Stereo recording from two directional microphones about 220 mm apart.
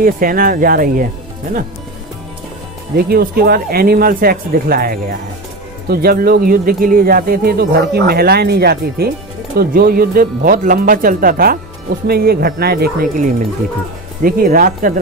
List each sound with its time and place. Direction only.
0.0 s speech: 40° right (ahead or behind)
3.0 s speech: 45° right (ahead or behind)